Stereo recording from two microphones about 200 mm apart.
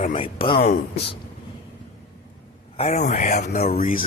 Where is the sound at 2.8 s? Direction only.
35° left (ahead or behind).